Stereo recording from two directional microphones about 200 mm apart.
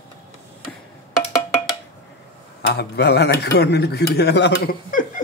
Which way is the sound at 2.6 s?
50° left (ahead or behind).